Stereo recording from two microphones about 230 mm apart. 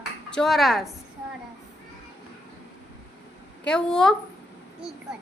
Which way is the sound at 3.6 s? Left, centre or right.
Centre.